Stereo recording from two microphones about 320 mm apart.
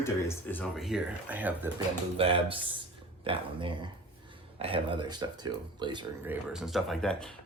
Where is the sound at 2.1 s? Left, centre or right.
Centre.